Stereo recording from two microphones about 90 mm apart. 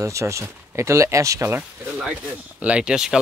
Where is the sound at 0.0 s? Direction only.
35° right (ahead or behind).